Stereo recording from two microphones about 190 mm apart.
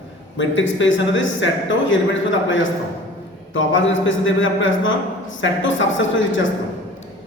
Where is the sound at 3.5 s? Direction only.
85° left.